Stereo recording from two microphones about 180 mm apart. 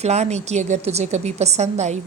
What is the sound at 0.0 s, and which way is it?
A woman's voice, 35° right (ahead or behind).